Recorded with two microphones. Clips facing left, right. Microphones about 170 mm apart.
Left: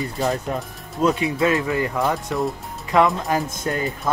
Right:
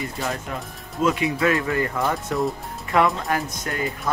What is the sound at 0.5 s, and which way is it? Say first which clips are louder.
Speech: left 5 dB; 35° left (ahead or behind).